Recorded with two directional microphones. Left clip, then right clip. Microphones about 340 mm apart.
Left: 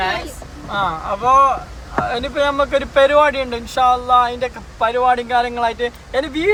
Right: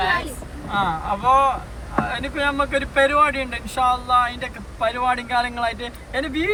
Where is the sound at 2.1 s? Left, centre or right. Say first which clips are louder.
Left 6 dB; centre.